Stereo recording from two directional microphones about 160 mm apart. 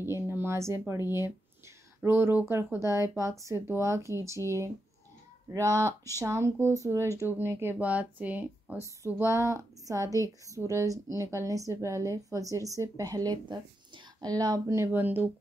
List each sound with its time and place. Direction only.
0.0 s a woman's voice: 15° right (ahead or behind)